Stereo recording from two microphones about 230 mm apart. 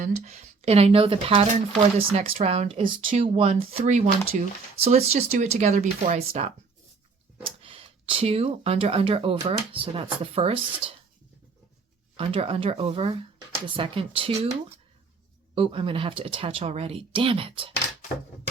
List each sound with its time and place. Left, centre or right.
0.0 s speech: right
12.1 s speech: right
15.5 s speech: right